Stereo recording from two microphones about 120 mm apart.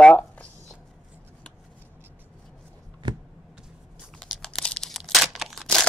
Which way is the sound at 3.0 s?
40° right (ahead or behind).